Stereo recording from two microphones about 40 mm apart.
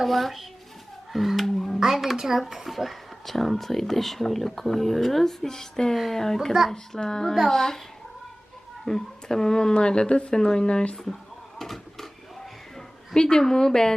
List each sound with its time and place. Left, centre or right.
0.0 s a child's voice: centre
8.8 s speech: centre
10.9 s a woman's voice: centre
11.6 s a sound: centre
13.1 s a woman's voice: centre